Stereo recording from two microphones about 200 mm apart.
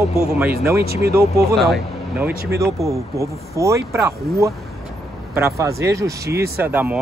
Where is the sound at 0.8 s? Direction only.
50° right (ahead or behind).